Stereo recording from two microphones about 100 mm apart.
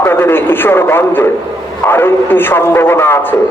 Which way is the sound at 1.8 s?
25° left (ahead or behind).